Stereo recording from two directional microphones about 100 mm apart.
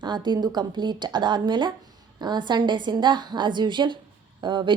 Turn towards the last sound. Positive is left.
turn(degrees=-50)  # may be behind; listen again after turning